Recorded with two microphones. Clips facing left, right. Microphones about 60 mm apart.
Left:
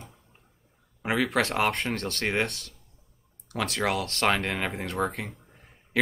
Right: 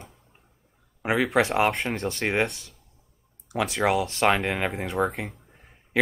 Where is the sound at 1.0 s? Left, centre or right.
Centre.